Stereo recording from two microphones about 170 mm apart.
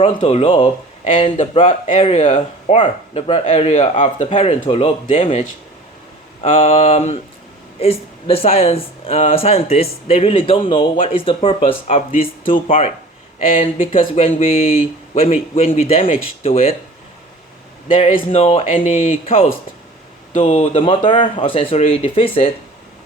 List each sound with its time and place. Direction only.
0.0 s speech: 35° left (ahead or behind)
6.5 s speech: 35° left (ahead or behind)
13.5 s speech: 50° left (ahead or behind)
14.2 s speech: 35° left (ahead or behind)
18.1 s speech: 40° left (ahead or behind)